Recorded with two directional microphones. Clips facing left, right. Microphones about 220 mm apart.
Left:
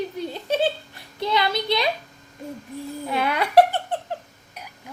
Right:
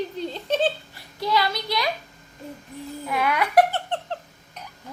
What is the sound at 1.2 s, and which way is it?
Speech, 20° left (ahead or behind).